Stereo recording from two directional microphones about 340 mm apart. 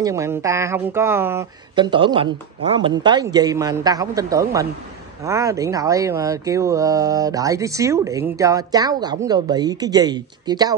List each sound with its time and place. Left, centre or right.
0.0 s speech: centre